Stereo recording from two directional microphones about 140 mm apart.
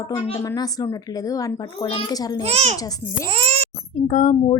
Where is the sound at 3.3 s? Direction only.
45° right (ahead or behind).